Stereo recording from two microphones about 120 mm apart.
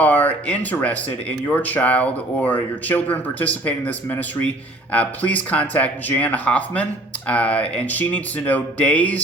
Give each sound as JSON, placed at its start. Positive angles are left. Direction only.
{"t": 0.0, "sound": "speech", "side_deg": 15}